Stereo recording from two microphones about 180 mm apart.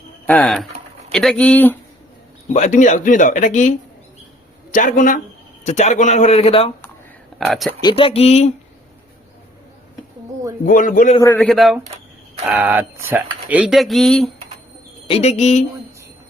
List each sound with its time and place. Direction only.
0.3 s speech: 5° left (ahead or behind)
2.5 s a man's voice: 40° left (ahead or behind)
7.3 s speech: centre (ahead or behind)
7.8 s a man's voice: 25° left (ahead or behind)
10.7 s speech: 45° left (ahead or behind)
11.2 s speech: 15° left (ahead or behind)
11.4 s speech: centre (ahead or behind)
15.0 s a man's voice: 35° left (ahead or behind)